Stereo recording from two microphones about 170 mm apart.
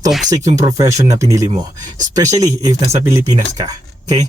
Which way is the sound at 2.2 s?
20° right (ahead or behind).